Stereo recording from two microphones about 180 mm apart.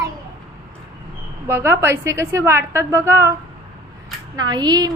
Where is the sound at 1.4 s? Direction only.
15° right (ahead or behind).